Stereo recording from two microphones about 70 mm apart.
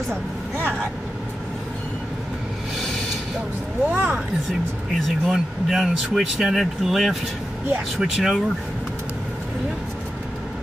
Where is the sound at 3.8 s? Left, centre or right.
Right.